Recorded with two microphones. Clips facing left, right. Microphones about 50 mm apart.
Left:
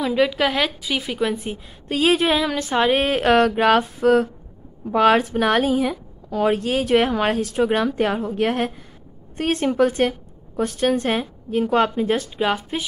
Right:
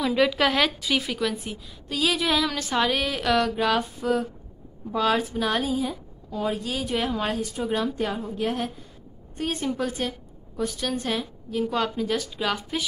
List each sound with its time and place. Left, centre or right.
0.0 s a woman's voice: centre
1.9 s speech: left
3.0 s a woman's voice: left